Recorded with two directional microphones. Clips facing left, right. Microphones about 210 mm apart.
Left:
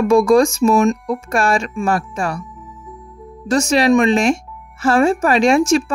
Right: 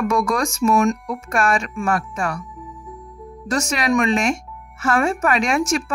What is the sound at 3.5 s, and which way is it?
Speech, 30° left (ahead or behind).